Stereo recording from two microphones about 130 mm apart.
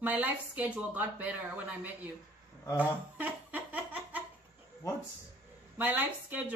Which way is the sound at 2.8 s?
15° right (ahead or behind).